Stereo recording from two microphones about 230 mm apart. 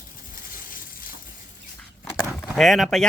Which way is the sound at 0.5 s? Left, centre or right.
Left.